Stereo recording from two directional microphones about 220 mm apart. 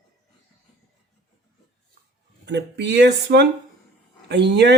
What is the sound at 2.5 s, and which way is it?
Speech, 50° right (ahead or behind).